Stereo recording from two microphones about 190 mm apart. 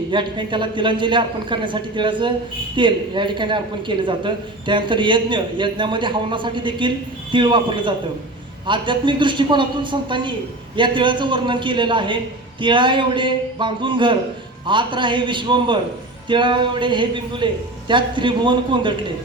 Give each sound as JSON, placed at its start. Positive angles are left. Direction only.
{"t": 0.1, "sound": "speech", "side_deg": -25}